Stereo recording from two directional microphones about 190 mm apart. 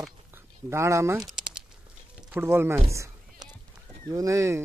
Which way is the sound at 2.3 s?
10° right (ahead or behind).